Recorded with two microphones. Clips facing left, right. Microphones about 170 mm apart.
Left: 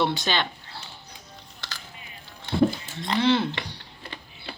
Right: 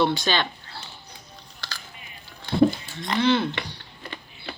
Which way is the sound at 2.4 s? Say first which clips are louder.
Right 3 dB; 25° left (ahead or behind).